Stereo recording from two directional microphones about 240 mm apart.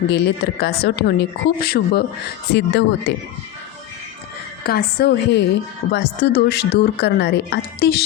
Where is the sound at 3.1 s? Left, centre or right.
Left.